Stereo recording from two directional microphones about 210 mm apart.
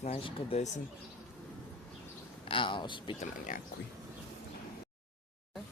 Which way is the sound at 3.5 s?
40° left (ahead or behind).